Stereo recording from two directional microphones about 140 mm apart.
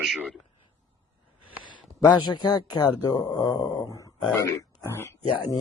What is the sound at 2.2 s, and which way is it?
A man's voice, 30° left (ahead or behind).